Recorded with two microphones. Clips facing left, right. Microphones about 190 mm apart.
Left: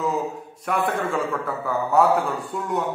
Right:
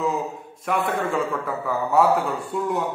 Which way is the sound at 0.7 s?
Centre (ahead or behind).